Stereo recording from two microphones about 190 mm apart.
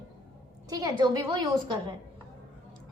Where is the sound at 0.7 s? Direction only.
20° right (ahead or behind).